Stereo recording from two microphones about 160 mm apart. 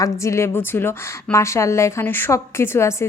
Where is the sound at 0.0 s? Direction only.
20° left (ahead or behind).